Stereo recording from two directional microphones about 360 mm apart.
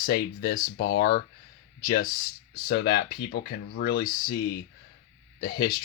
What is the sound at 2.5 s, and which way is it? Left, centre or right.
Speech, left.